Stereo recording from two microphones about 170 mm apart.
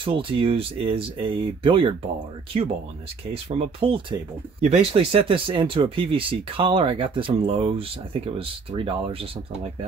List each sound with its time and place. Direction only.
0.0 s speech: 30° right (ahead or behind)
3.4 s speech: 35° right (ahead or behind)